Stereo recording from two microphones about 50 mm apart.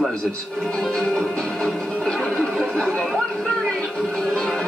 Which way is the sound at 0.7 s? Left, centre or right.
Centre.